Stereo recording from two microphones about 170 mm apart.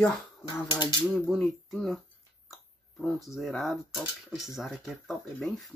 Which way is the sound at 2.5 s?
Centre (ahead or behind).